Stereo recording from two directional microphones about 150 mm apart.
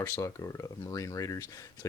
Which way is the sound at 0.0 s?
20° left (ahead or behind).